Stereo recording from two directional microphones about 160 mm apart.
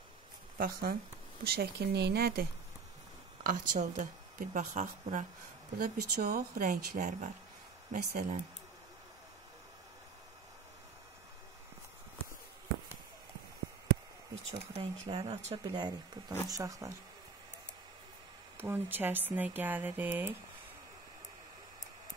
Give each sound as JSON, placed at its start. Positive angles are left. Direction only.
{"t": 0.6, "sound": "speech", "side_deg": -65}
{"t": 1.4, "sound": "speech", "side_deg": -80}
{"t": 3.4, "sound": "speech", "side_deg": -55}
{"t": 5.8, "sound": "speech", "side_deg": -75}
{"t": 6.6, "sound": "speech", "side_deg": -55}
{"t": 14.3, "sound": "speech", "side_deg": -35}
{"t": 18.6, "sound": "speech", "side_deg": -15}